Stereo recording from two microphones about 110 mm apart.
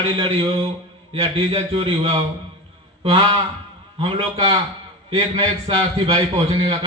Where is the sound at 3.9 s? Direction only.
55° right (ahead or behind).